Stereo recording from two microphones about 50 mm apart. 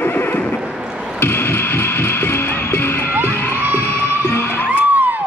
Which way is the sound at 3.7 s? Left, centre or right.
Left.